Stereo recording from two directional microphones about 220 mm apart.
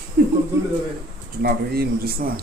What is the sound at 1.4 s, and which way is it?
Speech, 45° right (ahead or behind).